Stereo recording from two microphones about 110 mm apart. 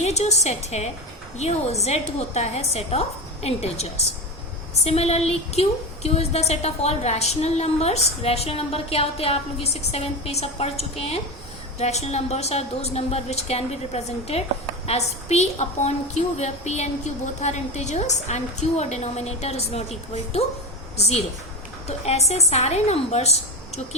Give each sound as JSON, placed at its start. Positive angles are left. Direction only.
{"t": 0.0, "sound": "a woman's voice", "side_deg": 90}
{"t": 1.4, "sound": "a woman's voice", "side_deg": 75}
{"t": 11.8, "sound": "a woman's voice", "side_deg": 80}